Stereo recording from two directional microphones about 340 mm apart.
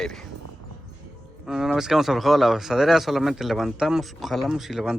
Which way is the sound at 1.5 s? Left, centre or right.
Centre.